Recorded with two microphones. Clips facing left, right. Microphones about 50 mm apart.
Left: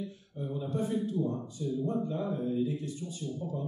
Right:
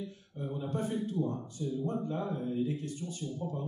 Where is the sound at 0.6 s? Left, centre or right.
Right.